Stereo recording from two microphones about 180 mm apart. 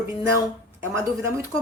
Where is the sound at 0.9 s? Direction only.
15° right (ahead or behind).